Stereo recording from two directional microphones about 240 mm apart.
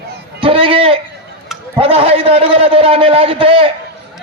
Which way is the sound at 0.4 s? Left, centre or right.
Right.